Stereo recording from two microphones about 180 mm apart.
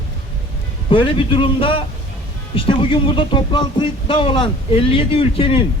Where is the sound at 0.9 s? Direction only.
30° left (ahead or behind).